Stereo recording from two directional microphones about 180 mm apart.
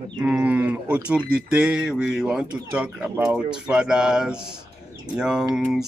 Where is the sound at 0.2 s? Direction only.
10° right (ahead or behind).